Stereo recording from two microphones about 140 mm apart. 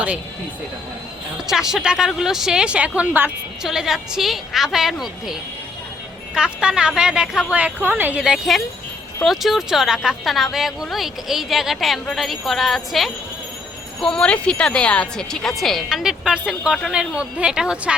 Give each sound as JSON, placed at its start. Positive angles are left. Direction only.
{"t": 1.5, "sound": "a woman's voice", "side_deg": -5}